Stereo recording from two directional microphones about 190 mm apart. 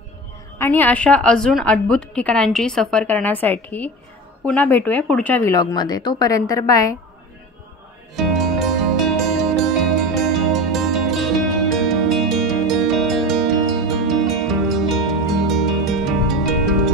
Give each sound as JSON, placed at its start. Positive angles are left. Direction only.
{"t": 0.6, "sound": "a woman's voice", "side_deg": 10}
{"t": 8.2, "sound": "music", "side_deg": 0}